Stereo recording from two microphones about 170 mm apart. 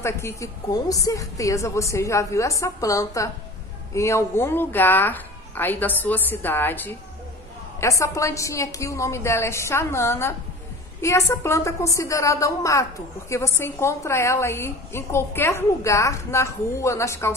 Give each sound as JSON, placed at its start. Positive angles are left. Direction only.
{"t": 0.0, "sound": "a woman's voice", "side_deg": 15}